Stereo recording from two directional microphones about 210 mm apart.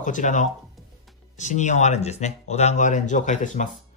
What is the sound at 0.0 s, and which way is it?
Speech, 35° left (ahead or behind).